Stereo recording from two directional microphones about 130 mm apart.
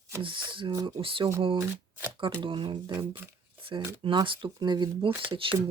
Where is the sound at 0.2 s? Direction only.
40° right (ahead or behind).